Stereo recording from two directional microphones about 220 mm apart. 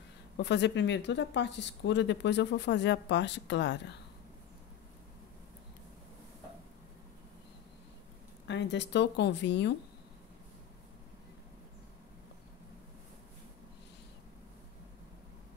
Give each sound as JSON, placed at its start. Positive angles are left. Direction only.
{"t": 0.4, "sound": "speech", "side_deg": 50}
{"t": 8.5, "sound": "speech", "side_deg": 55}